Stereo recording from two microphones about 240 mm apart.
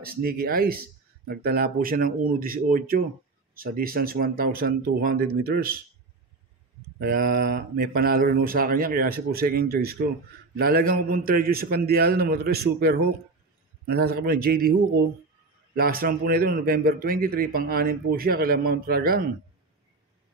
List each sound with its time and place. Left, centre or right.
0.0 s a man's voice: right
7.0 s a man's voice: right
15.7 s a man's voice: right